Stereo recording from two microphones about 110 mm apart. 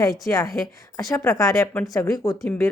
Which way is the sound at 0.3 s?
30° left (ahead or behind).